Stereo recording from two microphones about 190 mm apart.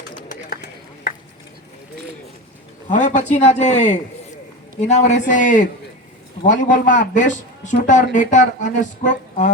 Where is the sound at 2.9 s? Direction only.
40° left (ahead or behind).